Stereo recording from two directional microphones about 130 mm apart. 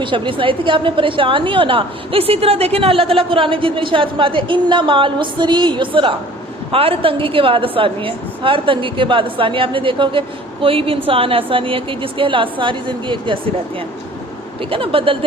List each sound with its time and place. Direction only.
0.0 s a woman's voice: 40° right (ahead or behind)
14.6 s a woman's voice: 45° right (ahead or behind)